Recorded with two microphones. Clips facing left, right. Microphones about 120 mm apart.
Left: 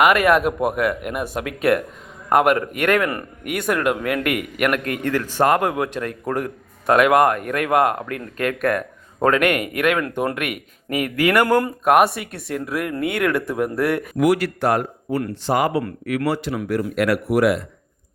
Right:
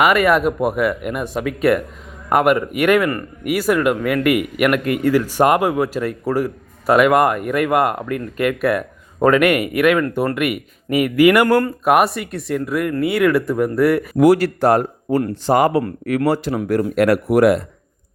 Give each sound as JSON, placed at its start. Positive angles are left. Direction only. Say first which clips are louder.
{"t": 0.0, "sound": "a man's voice", "louder": "right 1 dB", "side_deg": 0}
{"t": 14.2, "sound": "speech", "louder": "right 5 dB", "side_deg": -35}